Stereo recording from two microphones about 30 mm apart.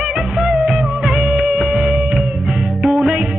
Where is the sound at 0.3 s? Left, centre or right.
Centre.